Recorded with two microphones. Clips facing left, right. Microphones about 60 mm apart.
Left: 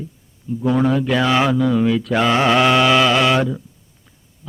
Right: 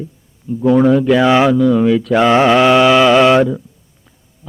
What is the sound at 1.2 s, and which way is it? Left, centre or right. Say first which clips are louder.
Speech: right 5 dB; centre.